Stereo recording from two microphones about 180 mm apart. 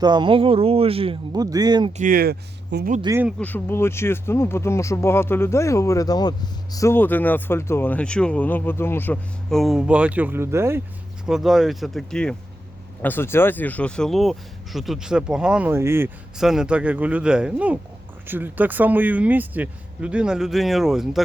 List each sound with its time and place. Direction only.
0.0 s speech: 25° right (ahead or behind)
2.0 s speech: 50° right (ahead or behind)
3.0 s speech: 15° right (ahead or behind)
3.4 s speech: 10° left (ahead or behind); by 10.8 s 15° right (ahead or behind)
11.3 s speech: centre (ahead or behind)
16.4 s speech: 5° right (ahead or behind)